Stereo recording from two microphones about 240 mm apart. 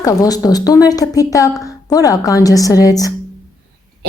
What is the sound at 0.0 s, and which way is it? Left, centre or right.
Speech, centre.